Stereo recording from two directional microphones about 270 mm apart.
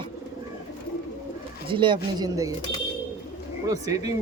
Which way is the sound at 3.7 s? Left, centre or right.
Centre.